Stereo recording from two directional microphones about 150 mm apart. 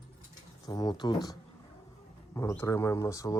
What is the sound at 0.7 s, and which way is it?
Speech, 25° left (ahead or behind).